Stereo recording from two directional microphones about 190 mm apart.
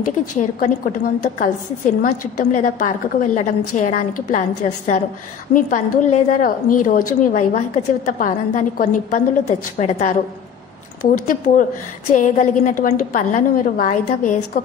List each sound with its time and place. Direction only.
0.6 s a woman's voice: 45° left (ahead or behind)